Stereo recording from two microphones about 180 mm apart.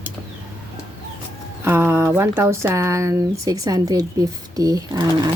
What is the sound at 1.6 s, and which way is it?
Speech, 10° right (ahead or behind).